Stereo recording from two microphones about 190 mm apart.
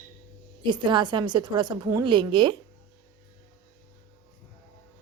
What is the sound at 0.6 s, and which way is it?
A woman's voice, 25° right (ahead or behind).